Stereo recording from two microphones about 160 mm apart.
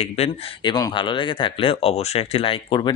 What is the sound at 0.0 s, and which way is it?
Speech, 40° left (ahead or behind).